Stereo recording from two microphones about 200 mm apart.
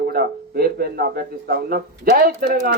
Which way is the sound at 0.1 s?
50° right (ahead or behind).